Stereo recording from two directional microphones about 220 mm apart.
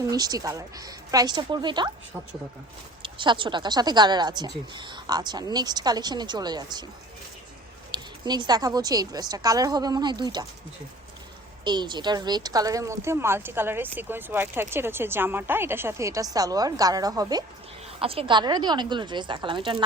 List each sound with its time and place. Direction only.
0.0 s speech: 15° right (ahead or behind)
3.0 s speech: 20° right (ahead or behind)
7.9 s speech: 20° right (ahead or behind)
11.6 s speech: 20° right (ahead or behind)